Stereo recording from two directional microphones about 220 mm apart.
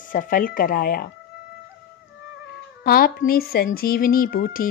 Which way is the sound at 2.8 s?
40° left (ahead or behind).